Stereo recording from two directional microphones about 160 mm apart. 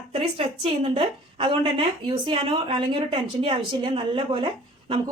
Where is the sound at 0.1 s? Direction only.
35° right (ahead or behind).